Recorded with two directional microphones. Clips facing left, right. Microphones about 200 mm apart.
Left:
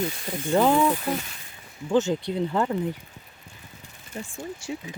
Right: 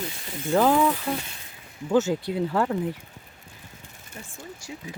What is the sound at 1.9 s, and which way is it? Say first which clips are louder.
Speech: even; 5° right (ahead or behind).